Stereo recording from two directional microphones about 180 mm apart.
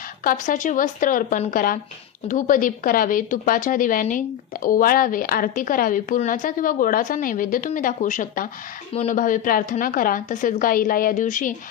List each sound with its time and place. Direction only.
0.2 s a woman's voice: 50° left (ahead or behind)